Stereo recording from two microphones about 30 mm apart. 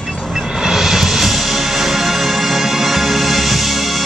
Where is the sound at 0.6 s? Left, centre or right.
Centre.